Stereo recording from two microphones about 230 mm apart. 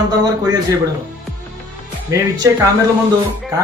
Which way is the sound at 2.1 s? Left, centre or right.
Centre.